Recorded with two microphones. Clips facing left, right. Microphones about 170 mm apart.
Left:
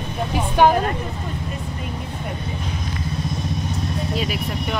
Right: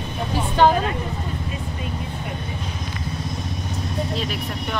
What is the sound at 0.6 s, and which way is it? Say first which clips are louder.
Speech: left 1 dB; 10° left (ahead or behind).